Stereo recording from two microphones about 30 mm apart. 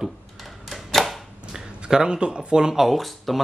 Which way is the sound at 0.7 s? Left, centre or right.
Centre.